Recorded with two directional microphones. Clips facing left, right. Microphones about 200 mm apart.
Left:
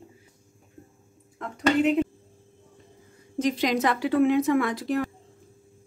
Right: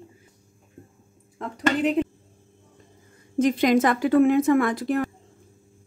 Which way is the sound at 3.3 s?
55° right (ahead or behind).